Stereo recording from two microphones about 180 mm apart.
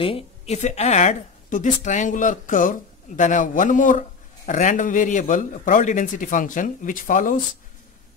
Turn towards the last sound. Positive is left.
turn(degrees=50)  # may be behind; listen again after turning